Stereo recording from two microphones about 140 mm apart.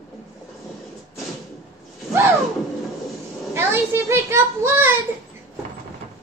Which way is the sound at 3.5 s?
15° right (ahead or behind).